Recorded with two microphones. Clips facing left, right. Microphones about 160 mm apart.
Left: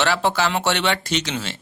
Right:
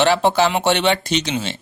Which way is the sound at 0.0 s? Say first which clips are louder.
Right 5 dB; 20° right (ahead or behind).